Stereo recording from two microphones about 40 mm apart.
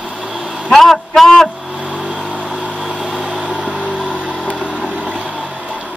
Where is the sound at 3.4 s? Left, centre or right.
Right.